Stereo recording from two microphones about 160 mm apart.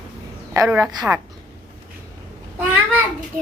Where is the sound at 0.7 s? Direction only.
10° right (ahead or behind).